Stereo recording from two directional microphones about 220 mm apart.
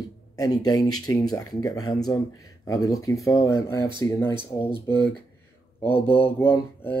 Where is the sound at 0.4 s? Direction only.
15° left (ahead or behind).